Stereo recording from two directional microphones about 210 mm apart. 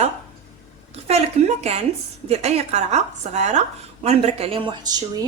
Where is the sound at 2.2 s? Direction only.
30° right (ahead or behind).